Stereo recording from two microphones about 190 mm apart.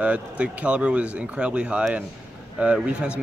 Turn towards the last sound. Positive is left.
turn(degrees=-5)  # may be behind; listen again after turning